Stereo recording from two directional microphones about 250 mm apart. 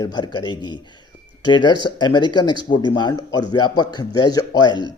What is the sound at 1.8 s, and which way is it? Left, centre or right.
Speech, centre.